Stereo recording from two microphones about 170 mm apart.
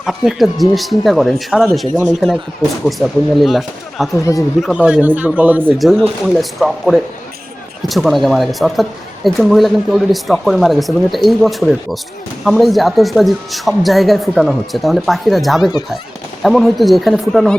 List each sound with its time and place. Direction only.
0.0 s speech: centre (ahead or behind)
4.1 s speech: 20° left (ahead or behind)
4.6 s a man's voice: 5° right (ahead or behind)
5.8 s speech: centre (ahead or behind)